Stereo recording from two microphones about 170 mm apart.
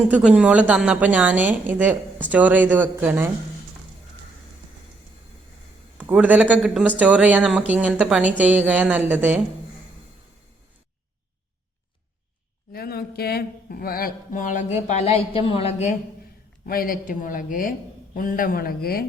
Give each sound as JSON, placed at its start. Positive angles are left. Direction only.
{"t": 0.0, "sound": "speech", "side_deg": -5}
{"t": 6.0, "sound": "speech", "side_deg": -10}
{"t": 12.7, "sound": "speech", "side_deg": 65}
{"t": 16.6, "sound": "speech", "side_deg": 60}